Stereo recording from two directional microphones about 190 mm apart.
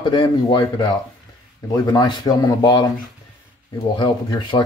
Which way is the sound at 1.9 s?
25° left (ahead or behind).